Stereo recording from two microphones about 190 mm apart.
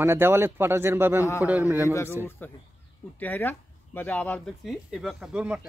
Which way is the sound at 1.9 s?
15° left (ahead or behind).